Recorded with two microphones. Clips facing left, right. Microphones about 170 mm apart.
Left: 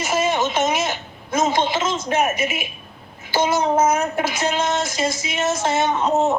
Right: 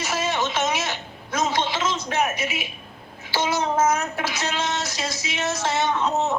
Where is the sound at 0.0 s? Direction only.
45° left (ahead or behind).